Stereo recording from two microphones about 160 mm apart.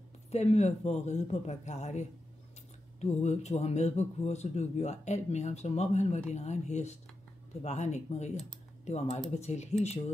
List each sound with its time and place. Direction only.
0.3 s speech: 45° left (ahead or behind)